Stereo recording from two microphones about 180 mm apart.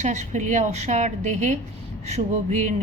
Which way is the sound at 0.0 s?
40° right (ahead or behind).